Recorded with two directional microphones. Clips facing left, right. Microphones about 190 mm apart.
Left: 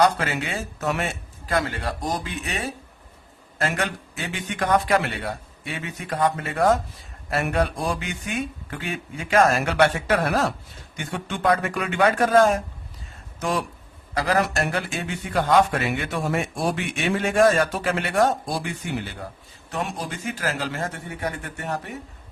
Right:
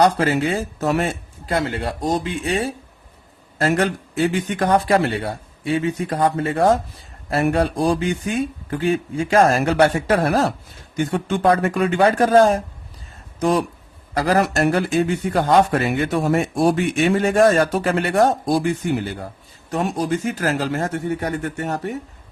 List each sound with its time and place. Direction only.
0.0 s speech: 35° right (ahead or behind)
19.7 s speech: 40° right (ahead or behind)